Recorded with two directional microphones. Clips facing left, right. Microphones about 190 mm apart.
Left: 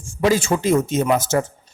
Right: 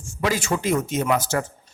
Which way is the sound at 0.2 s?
25° left (ahead or behind).